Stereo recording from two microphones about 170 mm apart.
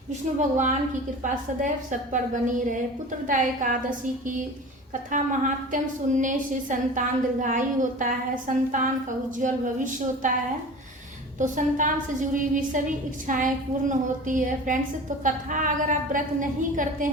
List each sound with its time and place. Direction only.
0.3 s a woman's voice: 45° right (ahead or behind)
11.3 s a woman's voice: 50° right (ahead or behind)